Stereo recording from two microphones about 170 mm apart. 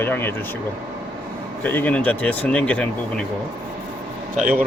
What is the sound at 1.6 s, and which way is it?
Speech, 10° left (ahead or behind).